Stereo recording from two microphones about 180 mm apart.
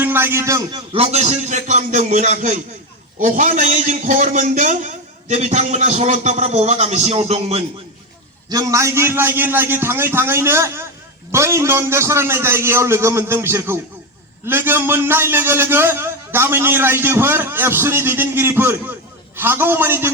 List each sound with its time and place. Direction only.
0.0 s a man's voice: 10° right (ahead or behind)
0.9 s a man's voice: 35° right (ahead or behind)
8.4 s a man's voice: 20° right (ahead or behind)